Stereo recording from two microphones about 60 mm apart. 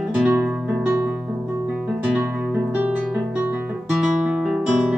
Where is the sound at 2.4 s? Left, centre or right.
Right.